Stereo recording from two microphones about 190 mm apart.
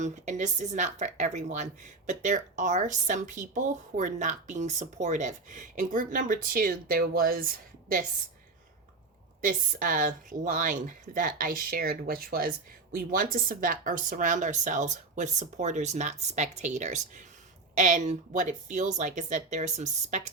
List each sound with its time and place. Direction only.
0.0 s speech: 40° right (ahead or behind)
9.4 s a woman's voice: 45° right (ahead or behind)